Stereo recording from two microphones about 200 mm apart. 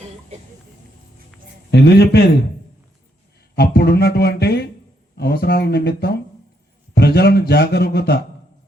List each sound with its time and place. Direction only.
1.7 s a man's voice: 55° left (ahead or behind)
3.5 s a man's voice: 50° left (ahead or behind)